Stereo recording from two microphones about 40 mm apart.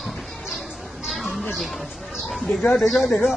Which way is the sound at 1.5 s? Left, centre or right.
Centre.